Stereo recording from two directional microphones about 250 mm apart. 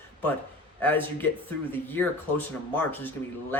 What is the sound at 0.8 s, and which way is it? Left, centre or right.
Speech, centre.